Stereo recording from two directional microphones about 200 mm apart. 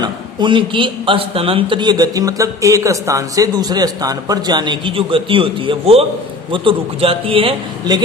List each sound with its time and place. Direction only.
0.0 s a man's voice: 25° right (ahead or behind)